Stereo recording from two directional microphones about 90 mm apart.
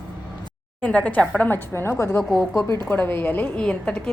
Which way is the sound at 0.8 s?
15° left (ahead or behind).